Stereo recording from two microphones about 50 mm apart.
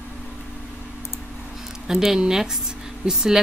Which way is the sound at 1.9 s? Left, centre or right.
Centre.